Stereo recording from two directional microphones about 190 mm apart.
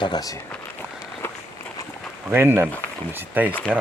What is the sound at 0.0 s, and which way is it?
Speech, 20° left (ahead or behind).